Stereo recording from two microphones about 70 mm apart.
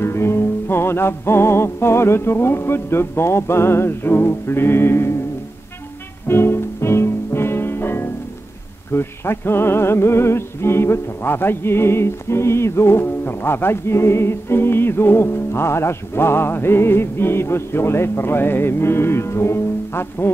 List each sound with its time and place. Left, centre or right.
0.0 s music: left
6.2 s music: left